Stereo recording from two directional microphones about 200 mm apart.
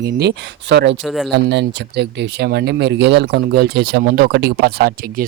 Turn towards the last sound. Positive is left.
turn(degrees=-45)  # may be behind; listen again after turning